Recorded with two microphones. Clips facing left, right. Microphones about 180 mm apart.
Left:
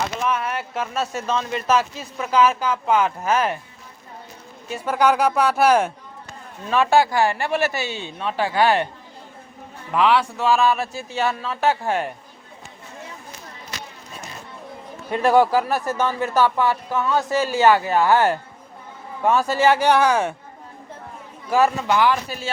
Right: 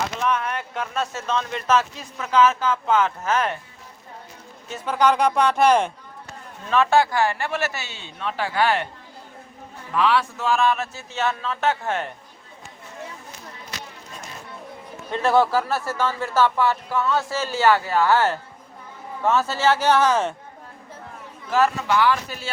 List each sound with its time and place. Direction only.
0.2 s speech: 5° left (ahead or behind)
4.7 s speech: 10° left (ahead or behind)
9.9 s speech: 15° left (ahead or behind)
15.1 s speech: 15° left (ahead or behind)
21.5 s speech: 15° left (ahead or behind)